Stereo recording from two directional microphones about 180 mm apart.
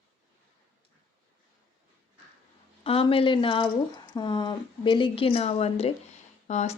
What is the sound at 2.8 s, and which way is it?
Speech, 30° left (ahead or behind).